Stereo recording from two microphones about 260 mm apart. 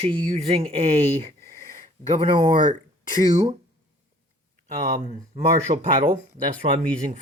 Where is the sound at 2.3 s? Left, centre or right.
Centre.